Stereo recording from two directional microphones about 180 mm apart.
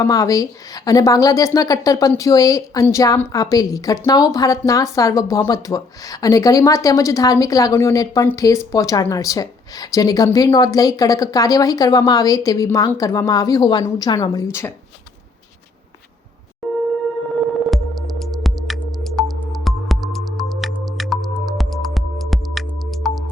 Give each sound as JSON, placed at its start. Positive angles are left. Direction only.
{"t": 0.0, "sound": "a woman's voice", "side_deg": 20}
{"t": 16.6, "sound": "a sound", "side_deg": 0}
{"t": 17.7, "sound": "music", "side_deg": 0}